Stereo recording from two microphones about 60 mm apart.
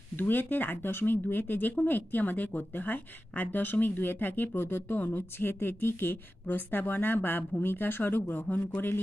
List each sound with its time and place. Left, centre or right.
0.1 s a woman's voice: left